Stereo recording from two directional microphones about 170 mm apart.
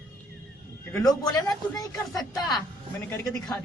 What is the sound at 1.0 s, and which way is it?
A woman's voice, 20° left (ahead or behind).